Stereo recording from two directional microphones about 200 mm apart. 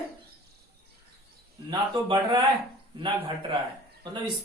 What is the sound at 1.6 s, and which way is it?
Speech, 20° right (ahead or behind).